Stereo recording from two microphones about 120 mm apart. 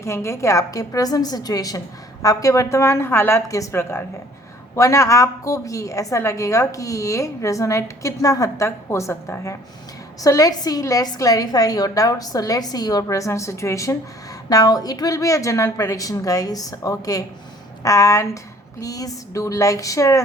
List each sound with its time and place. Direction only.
0.0 s a woman's voice: 25° left (ahead or behind)